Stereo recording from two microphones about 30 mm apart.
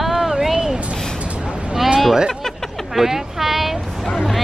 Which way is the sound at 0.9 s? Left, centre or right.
Centre.